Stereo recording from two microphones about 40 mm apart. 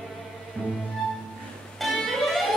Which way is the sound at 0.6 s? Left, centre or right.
Left.